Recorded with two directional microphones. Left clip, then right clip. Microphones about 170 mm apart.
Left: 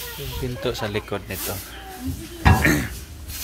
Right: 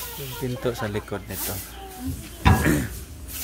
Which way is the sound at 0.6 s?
20° right (ahead or behind).